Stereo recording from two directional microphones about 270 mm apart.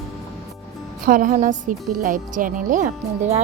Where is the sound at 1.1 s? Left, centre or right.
Right.